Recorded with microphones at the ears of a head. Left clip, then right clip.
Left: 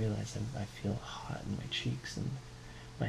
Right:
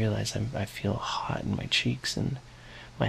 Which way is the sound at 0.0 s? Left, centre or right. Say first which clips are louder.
Right 8 dB; right.